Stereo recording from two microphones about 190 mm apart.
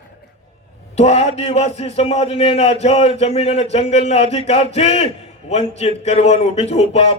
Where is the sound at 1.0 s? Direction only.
35° left (ahead or behind).